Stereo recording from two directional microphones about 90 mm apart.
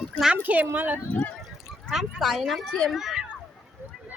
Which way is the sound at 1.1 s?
15° left (ahead or behind).